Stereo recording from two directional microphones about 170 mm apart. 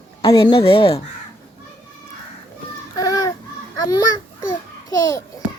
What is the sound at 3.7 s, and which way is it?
Speech, 20° left (ahead or behind).